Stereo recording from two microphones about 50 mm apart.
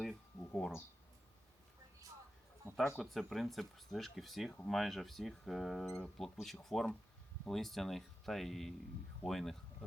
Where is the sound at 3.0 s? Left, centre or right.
Centre.